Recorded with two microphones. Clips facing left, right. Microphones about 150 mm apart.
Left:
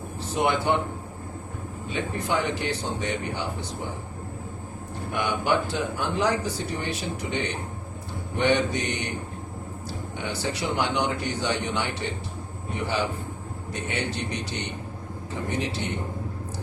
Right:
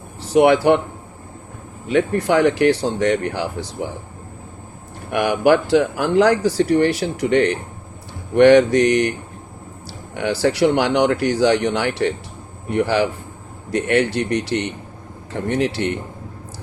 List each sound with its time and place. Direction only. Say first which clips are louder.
0.2 s speech: right 11 dB; 90° right
1.9 s speech: right 11 dB; 80° right
5.1 s speech: right 9 dB; 90° right
10.2 s speech: right 13 dB; 80° right